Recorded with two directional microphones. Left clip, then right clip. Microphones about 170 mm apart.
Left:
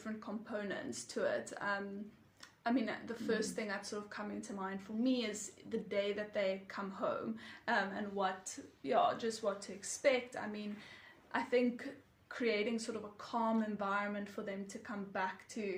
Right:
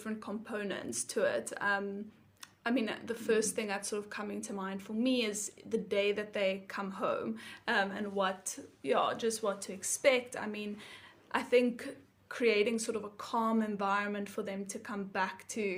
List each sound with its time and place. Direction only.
0.0 s a woman's voice: 30° right (ahead or behind)